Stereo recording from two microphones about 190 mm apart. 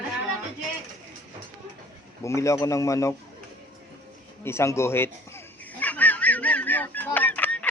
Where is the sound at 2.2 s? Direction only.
15° left (ahead or behind).